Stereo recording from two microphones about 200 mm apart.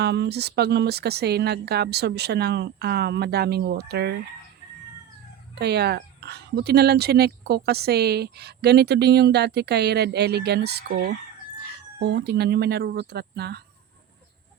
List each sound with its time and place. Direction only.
0.0 s speech: 55° right (ahead or behind)
5.5 s speech: 55° right (ahead or behind)